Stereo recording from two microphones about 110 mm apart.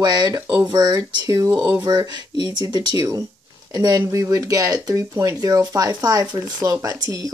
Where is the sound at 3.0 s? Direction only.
30° right (ahead or behind).